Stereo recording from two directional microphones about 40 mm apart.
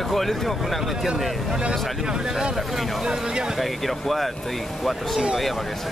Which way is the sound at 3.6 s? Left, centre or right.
Centre.